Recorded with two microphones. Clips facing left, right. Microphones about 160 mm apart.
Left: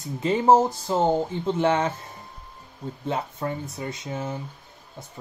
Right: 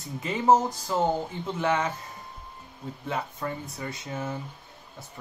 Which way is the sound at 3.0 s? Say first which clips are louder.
Left 4 dB; 30° left (ahead or behind).